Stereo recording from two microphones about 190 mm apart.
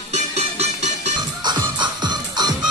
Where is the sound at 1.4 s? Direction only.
25° right (ahead or behind).